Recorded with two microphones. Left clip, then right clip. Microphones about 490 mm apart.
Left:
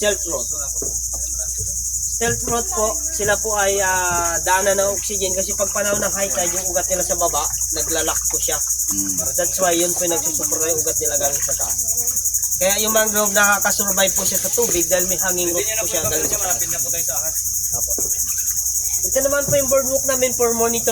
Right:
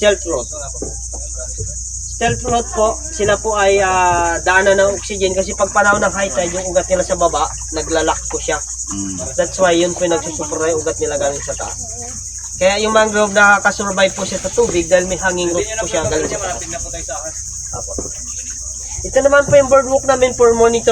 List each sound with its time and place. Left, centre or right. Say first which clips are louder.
2.2 s cricket: right 6 dB; left
12.5 s cricket: right 7 dB; left
19.1 s cricket: right 9 dB; left